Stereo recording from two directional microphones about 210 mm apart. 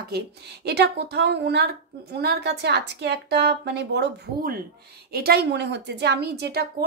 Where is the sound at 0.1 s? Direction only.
50° right (ahead or behind).